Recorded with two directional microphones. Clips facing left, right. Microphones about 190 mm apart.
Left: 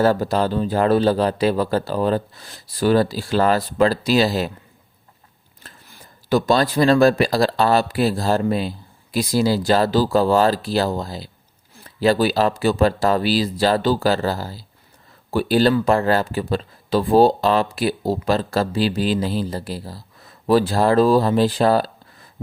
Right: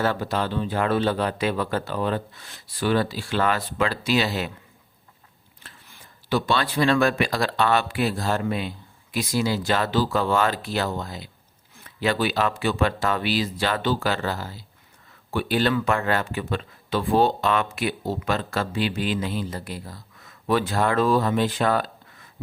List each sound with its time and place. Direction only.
0.0 s speech: 40° left (ahead or behind)
5.6 s speech: 40° left (ahead or behind)